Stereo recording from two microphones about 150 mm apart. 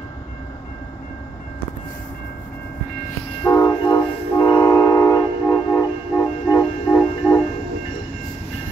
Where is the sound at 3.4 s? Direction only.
25° left (ahead or behind).